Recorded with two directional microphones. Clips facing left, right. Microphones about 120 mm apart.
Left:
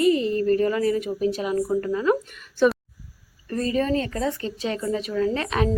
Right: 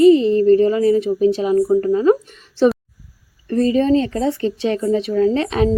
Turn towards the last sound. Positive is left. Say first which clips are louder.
# right 7 dB
turn(degrees=-30)  # may be behind; listen again after turning